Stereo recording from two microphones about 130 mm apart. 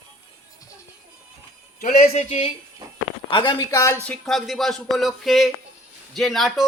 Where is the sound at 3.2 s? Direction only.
40° left (ahead or behind).